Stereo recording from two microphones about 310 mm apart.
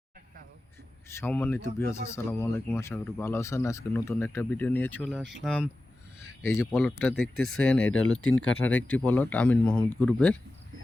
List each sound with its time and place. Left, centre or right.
1.0 s speech: centre
7.9 s speech: left
8.6 s speech: centre